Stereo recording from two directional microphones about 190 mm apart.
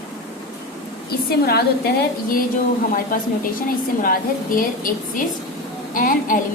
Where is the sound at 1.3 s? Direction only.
55° left (ahead or behind).